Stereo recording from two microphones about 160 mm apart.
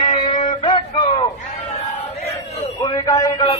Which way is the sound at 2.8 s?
25° left (ahead or behind).